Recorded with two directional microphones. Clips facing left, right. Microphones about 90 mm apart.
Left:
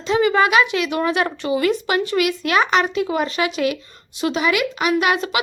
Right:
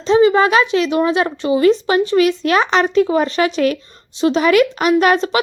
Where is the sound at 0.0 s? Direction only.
25° right (ahead or behind).